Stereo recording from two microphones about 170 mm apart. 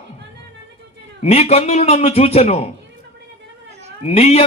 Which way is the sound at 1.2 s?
40° left (ahead or behind).